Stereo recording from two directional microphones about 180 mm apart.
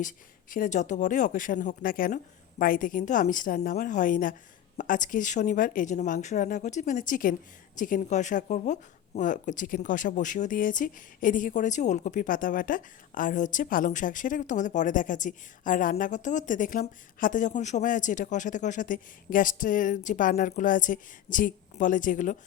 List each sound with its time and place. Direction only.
0.5 s speech: 45° left (ahead or behind)